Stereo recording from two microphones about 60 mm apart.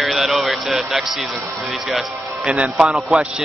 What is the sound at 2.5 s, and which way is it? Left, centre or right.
Speech, centre.